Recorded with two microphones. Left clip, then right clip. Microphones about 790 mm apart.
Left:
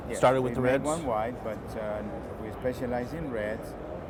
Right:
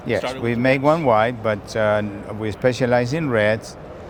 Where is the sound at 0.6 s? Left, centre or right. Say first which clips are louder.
Right 10 dB; right.